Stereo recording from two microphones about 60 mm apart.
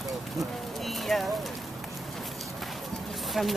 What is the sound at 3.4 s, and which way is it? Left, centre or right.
Speech, centre.